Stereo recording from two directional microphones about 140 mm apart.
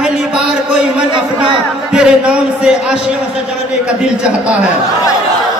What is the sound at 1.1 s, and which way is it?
Speech, 35° right (ahead or behind).